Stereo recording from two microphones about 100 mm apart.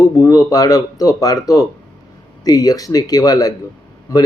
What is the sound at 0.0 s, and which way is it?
Speech, 30° left (ahead or behind).